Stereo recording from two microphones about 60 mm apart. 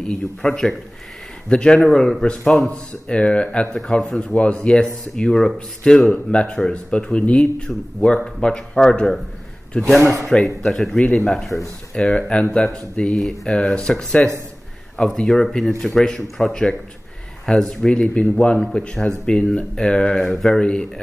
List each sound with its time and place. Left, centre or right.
0.0 s speech: centre
3.1 s speech: centre
12.2 s speech: centre
12.5 s speech: centre